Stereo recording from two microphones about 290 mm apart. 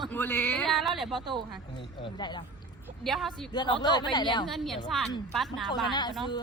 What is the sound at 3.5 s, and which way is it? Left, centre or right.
Speech, centre.